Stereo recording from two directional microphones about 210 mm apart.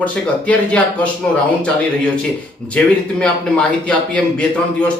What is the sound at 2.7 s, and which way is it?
A man's voice, 5° left (ahead or behind).